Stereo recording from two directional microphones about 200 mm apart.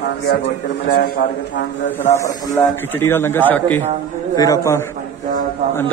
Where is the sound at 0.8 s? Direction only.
50° left (ahead or behind).